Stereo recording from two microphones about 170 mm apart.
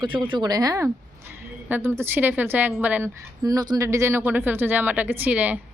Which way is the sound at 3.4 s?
20° right (ahead or behind).